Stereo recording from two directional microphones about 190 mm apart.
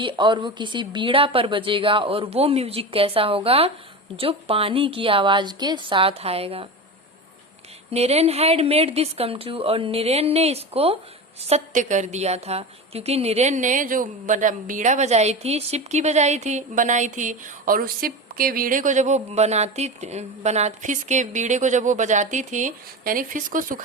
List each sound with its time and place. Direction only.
0.0 s a woman's voice: 25° right (ahead or behind)
7.9 s a woman's voice: 35° right (ahead or behind)